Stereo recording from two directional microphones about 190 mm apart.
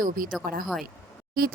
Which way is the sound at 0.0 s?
50° right (ahead or behind).